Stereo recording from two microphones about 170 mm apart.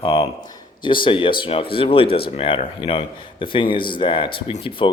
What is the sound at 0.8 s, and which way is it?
A man's voice, 30° left (ahead or behind).